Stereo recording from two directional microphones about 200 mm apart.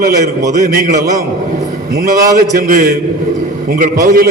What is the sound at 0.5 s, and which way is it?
Speech, 40° right (ahead or behind).